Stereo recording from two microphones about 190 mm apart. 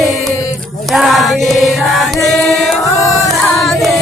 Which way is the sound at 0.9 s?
Centre (ahead or behind).